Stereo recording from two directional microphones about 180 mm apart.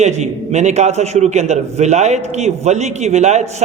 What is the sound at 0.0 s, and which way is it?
A man's voice, 40° right (ahead or behind).